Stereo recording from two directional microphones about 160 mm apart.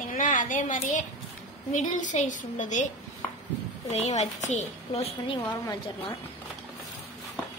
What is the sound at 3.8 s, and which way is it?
A woman's voice, 45° left (ahead or behind).